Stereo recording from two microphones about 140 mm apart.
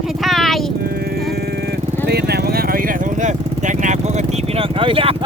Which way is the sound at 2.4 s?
90° right.